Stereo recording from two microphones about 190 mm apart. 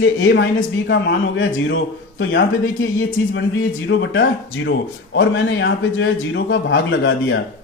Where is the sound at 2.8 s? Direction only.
90° left.